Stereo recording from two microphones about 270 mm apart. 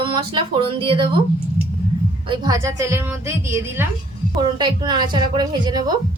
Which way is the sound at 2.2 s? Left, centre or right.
Centre.